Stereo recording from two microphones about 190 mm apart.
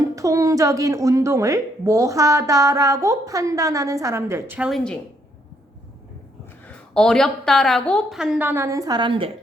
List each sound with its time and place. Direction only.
0.2 s a woman's voice: 15° right (ahead or behind)
6.7 s a woman's voice: 5° left (ahead or behind); by 9.3 s 25° right (ahead or behind)